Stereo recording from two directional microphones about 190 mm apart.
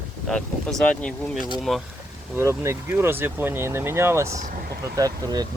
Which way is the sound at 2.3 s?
15° right (ahead or behind).